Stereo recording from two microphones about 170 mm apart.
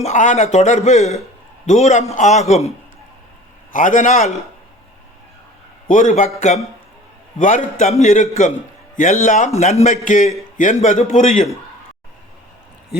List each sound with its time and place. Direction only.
0.0 s a man's voice: 45° left (ahead or behind)
3.7 s a man's voice: 50° left (ahead or behind)
5.9 s a man's voice: 50° left (ahead or behind)
7.3 s a man's voice: 50° left (ahead or behind)